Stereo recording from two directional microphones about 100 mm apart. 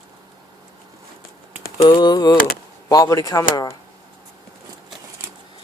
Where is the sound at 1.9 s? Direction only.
50° left (ahead or behind); by 3.7 s 35° left (ahead or behind).